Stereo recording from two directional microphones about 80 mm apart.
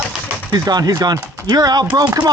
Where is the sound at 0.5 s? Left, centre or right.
Right.